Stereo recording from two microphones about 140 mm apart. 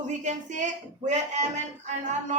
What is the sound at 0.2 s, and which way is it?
Speech, 60° right (ahead or behind).